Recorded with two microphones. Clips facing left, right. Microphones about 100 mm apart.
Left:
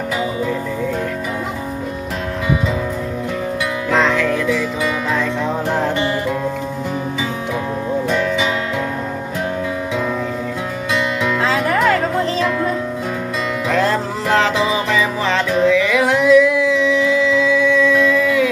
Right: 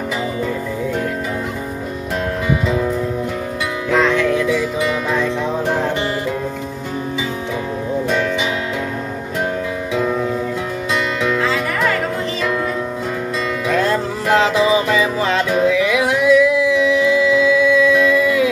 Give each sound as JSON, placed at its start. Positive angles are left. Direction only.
{"t": 3.9, "sound": "music", "side_deg": -5}
{"t": 15.0, "sound": "music", "side_deg": -15}